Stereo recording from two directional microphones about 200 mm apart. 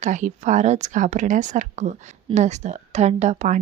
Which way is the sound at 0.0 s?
40° right (ahead or behind).